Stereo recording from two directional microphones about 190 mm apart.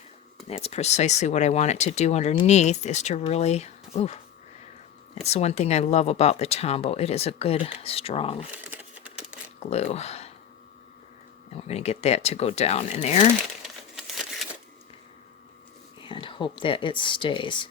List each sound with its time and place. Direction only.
0.4 s speech: 35° left (ahead or behind)
5.2 s speech: 35° left (ahead or behind)
8.7 s a sound: 10° right (ahead or behind)
9.6 s speech: 35° left (ahead or behind)
11.7 s speech: 35° left (ahead or behind)
13.6 s crumpling: centre (ahead or behind)
16.0 s speech: 25° left (ahead or behind)